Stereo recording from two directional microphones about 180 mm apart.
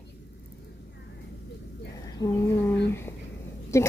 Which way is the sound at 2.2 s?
15° left (ahead or behind).